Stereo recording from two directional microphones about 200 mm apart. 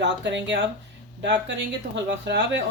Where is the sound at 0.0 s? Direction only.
60° right (ahead or behind).